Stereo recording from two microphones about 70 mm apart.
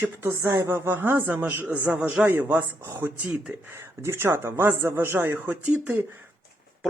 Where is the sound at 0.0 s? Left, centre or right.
Right.